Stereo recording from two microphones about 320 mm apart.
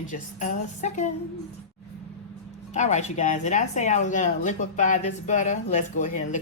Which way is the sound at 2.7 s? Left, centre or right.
Left.